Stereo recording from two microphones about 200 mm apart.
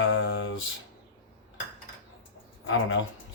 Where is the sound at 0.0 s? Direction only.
70° left (ahead or behind).